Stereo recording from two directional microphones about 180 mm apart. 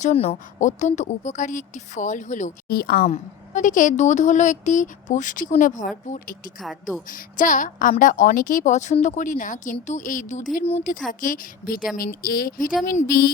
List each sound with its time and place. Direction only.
0.0 s a woman's voice: 40° left (ahead or behind); by 3.1 s 55° left (ahead or behind)
3.1 s a woman's voice: 45° left (ahead or behind)
6.6 s speech: centre (ahead or behind)
7.1 s a woman's voice: 45° left (ahead or behind)